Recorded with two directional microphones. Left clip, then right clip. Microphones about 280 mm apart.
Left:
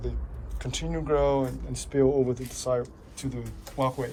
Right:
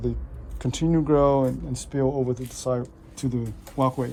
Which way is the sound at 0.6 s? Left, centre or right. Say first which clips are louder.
Right 7 dB; right.